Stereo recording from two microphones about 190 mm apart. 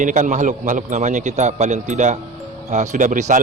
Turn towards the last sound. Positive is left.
turn(degrees=-40)  # may be behind; listen again after turning